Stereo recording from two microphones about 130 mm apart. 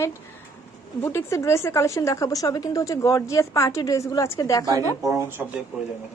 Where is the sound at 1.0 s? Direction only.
20° left (ahead or behind).